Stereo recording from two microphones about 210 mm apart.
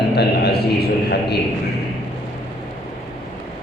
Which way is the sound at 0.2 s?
50° left (ahead or behind).